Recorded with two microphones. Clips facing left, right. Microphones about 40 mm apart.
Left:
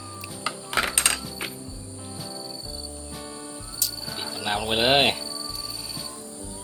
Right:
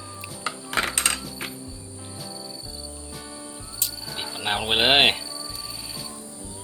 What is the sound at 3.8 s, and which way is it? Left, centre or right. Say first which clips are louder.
Music: even; right.